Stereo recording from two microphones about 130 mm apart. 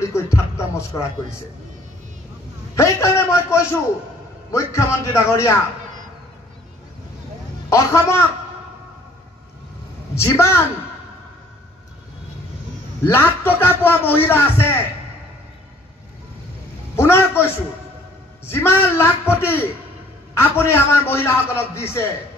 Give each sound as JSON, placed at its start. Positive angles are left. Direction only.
{"t": 0.0, "sound": "a man's voice", "side_deg": 20}
{"t": 2.7, "sound": "a man's voice", "side_deg": 20}
{"t": 7.7, "sound": "a man's voice", "side_deg": 20}
{"t": 10.1, "sound": "a man's voice", "side_deg": 20}
{"t": 13.0, "sound": "a man's voice", "side_deg": 15}
{"t": 16.9, "sound": "a man's voice", "side_deg": 20}